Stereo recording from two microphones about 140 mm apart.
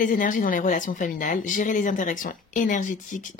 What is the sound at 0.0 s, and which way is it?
Speech, 70° left (ahead or behind).